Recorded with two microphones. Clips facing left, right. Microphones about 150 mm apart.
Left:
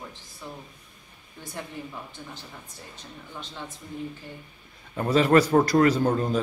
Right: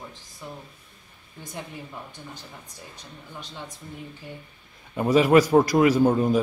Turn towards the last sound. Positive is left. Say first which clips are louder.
# right 3 dB
turn(degrees=-10)  # may be behind; listen again after turning